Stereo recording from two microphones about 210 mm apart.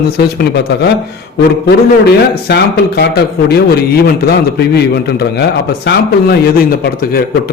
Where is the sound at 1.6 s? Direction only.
50° left (ahead or behind).